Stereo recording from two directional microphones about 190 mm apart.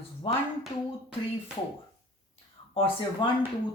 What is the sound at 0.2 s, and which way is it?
Speech, 30° left (ahead or behind).